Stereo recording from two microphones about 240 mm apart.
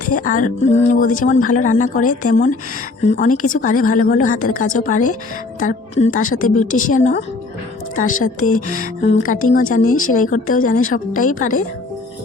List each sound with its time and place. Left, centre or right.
0.0 s speech: left
8.5 s music: left
8.8 s speech: left